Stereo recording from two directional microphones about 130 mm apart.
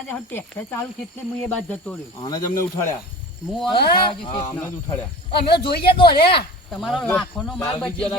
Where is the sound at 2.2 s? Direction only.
30° left (ahead or behind).